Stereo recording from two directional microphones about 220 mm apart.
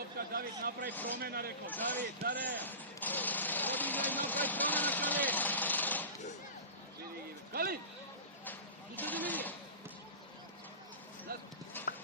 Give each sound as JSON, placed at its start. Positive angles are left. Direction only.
{"t": 0.3, "sound": "a man's voice", "side_deg": -45}
{"t": 0.9, "sound": "a man's voice", "side_deg": 10}
{"t": 1.2, "sound": "a man's voice", "side_deg": -45}
{"t": 1.7, "sound": "a man's voice", "side_deg": 10}
{"t": 2.6, "sound": "a sound", "side_deg": 10}
{"t": 7.5, "sound": "a sound", "side_deg": -45}
{"t": 9.0, "sound": "vehicle", "side_deg": 10}
{"t": 11.3, "sound": "chopping", "side_deg": -45}